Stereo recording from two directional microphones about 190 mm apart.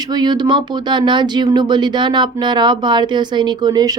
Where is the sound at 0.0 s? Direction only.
20° right (ahead or behind).